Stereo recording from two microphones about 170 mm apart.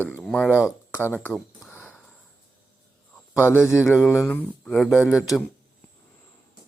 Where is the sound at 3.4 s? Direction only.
15° left (ahead or behind); by 5.4 s centre (ahead or behind).